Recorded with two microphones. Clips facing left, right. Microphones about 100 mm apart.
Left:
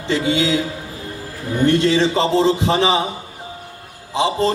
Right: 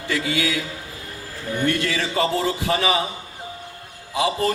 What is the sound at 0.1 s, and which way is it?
Speech, 25° left (ahead or behind).